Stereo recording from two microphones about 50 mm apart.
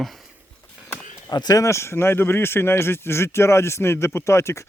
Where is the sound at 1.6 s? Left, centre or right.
Left.